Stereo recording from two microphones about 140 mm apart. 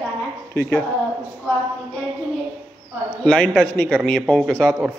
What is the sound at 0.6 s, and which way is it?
Speech, 15° left (ahead or behind).